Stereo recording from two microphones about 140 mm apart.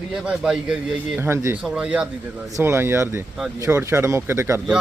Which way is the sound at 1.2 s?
20° right (ahead or behind).